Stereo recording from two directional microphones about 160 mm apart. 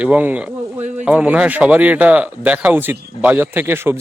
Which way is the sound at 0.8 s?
45° right (ahead or behind).